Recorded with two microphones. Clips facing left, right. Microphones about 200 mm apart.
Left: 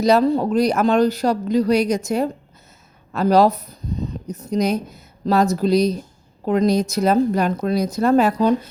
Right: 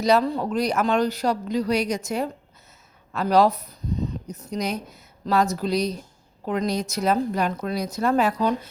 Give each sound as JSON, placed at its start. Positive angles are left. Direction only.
{"t": 0.0, "sound": "a woman's voice", "side_deg": 40}
{"t": 4.1, "sound": "a sound", "side_deg": 45}
{"t": 4.5, "sound": "a woman's voice", "side_deg": 40}